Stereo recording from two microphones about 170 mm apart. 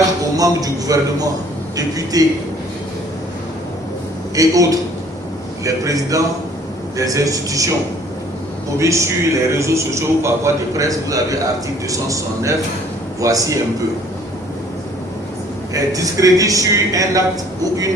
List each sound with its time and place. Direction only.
0.3 s a man's voice: 20° right (ahead or behind)
4.4 s a man's voice: 20° right (ahead or behind)
8.8 s a man's voice: 15° right (ahead or behind)
15.7 s a man's voice: 20° right (ahead or behind)